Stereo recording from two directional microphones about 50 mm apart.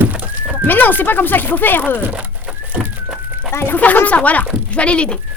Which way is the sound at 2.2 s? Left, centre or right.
Right.